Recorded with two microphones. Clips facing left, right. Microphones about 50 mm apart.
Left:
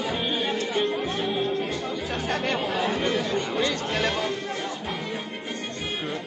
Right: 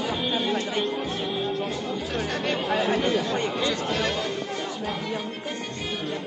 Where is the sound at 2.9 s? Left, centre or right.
Centre.